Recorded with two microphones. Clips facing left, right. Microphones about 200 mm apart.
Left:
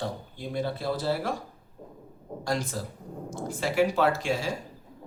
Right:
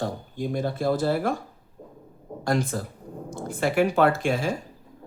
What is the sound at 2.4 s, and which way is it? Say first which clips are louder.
Speech: right 5 dB; 55° right (ahead or behind).